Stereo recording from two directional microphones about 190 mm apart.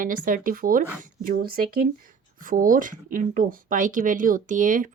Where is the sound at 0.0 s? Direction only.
45° right (ahead or behind).